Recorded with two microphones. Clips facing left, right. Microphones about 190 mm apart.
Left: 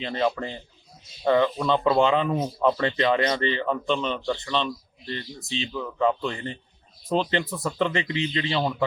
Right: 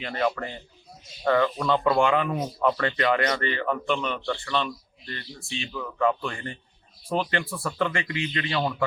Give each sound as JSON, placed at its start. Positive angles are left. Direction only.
{"t": 0.0, "sound": "speech", "side_deg": 20}